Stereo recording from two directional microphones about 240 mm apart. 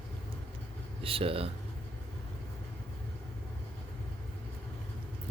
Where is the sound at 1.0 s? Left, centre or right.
Right.